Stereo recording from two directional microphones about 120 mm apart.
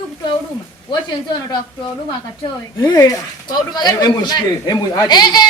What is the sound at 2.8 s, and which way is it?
Speech, 30° left (ahead or behind).